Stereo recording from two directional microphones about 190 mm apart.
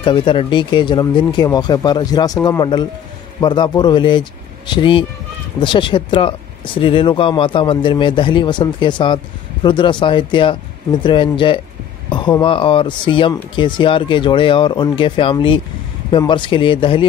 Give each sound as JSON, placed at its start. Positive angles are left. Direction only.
{"t": 0.0, "sound": "speech", "side_deg": 25}